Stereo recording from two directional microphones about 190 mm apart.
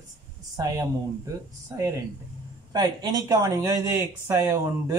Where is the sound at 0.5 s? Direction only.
20° right (ahead or behind).